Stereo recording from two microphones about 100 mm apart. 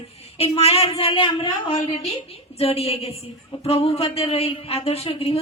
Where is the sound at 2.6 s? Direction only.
90° left.